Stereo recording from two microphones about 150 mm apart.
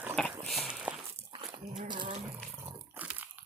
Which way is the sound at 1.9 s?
30° right (ahead or behind).